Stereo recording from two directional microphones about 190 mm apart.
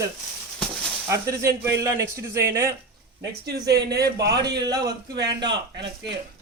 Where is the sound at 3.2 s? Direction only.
60° right (ahead or behind).